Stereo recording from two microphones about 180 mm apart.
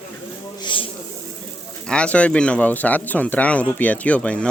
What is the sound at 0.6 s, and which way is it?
Snake, 30° left (ahead or behind).